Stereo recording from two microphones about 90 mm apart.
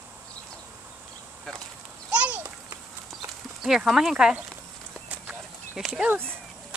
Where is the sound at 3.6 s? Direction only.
5° right (ahead or behind).